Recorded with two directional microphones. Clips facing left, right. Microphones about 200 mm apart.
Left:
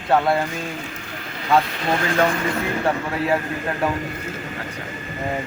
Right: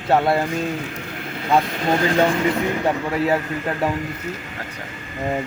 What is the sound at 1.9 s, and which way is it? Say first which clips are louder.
Speech: right 3 dB; 20° right (ahead or behind).